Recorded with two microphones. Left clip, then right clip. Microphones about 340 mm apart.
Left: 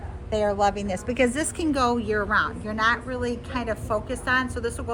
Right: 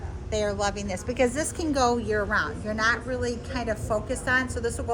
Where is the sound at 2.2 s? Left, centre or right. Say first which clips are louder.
Left 3 dB; centre.